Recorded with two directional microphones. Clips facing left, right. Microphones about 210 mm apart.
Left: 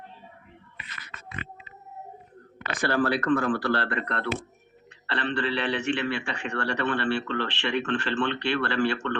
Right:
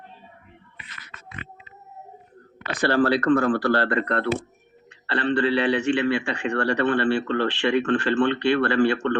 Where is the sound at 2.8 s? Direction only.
35° right (ahead or behind).